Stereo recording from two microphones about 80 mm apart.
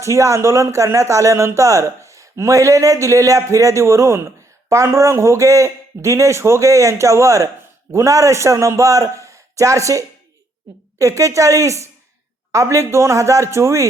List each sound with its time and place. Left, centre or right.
0.0 s speech: right